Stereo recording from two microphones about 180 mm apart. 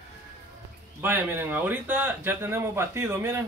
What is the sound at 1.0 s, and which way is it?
A man's voice, 10° right (ahead or behind).